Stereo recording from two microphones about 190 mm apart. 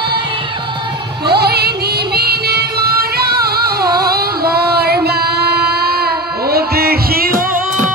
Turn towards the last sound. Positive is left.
turn(degrees=-50)  # may be behind; listen again after turning